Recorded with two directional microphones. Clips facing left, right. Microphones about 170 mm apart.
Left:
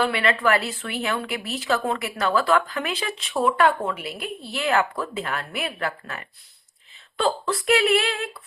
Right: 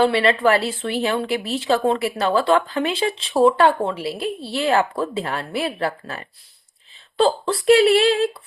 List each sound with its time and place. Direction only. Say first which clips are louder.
0.0 s a woman's voice: right 5 dB; 30° right (ahead or behind)